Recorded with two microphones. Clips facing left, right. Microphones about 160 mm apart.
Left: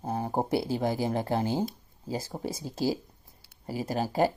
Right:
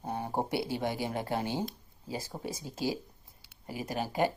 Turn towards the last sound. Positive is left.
turn(degrees=35)  # may be behind; listen again after turning